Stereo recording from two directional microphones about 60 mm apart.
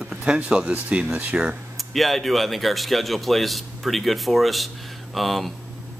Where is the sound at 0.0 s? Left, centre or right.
Centre.